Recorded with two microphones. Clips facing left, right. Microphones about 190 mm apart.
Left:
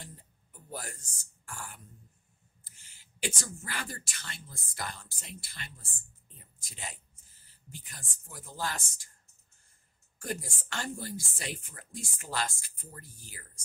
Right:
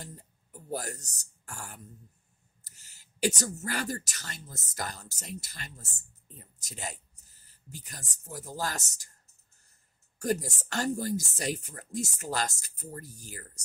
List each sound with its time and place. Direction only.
0.0 s speech: 40° right (ahead or behind)
10.1 s speech: 40° right (ahead or behind)